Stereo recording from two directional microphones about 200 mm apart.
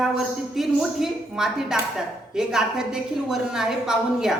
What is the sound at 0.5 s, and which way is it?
Speech, centre (ahead or behind).